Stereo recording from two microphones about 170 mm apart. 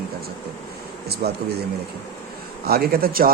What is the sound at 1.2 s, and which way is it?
Speech, 70° right (ahead or behind).